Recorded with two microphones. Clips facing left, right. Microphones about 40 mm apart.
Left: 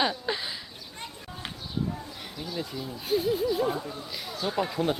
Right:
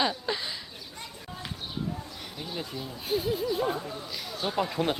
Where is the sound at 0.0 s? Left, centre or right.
Centre.